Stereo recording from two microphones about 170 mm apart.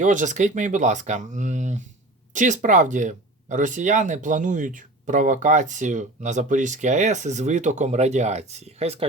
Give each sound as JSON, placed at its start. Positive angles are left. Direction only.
{"t": 0.0, "sound": "speech", "side_deg": -45}